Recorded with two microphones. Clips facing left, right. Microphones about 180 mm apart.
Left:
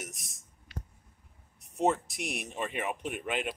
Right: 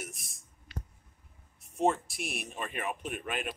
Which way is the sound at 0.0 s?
20° left (ahead or behind).